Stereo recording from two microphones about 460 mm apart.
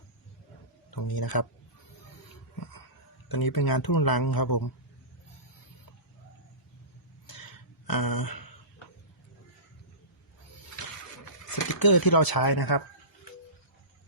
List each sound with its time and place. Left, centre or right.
0.9 s speech: left
3.2 s speech: left
7.3 s a sound: left
11.5 s speech: left